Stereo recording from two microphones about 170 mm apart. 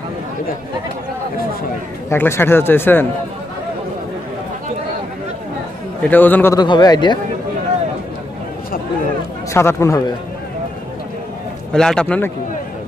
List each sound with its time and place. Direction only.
2.0 s speech: 15° left (ahead or behind)
6.0 s speech: 10° left (ahead or behind)
6.6 s speech: 25° left (ahead or behind)
9.5 s speech: 15° left (ahead or behind)
11.7 s a man's voice: 5° left (ahead or behind)